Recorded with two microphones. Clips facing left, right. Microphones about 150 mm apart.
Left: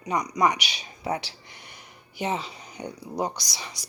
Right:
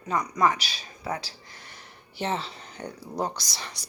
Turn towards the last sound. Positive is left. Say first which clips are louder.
# even
turn(degrees=10)  # may be behind; listen again after turning